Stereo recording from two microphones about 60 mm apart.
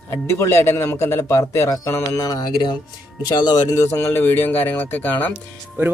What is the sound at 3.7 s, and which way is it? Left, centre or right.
Speech, left.